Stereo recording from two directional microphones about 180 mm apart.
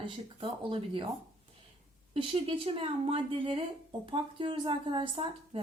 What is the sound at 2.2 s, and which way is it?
Speech, 30° right (ahead or behind).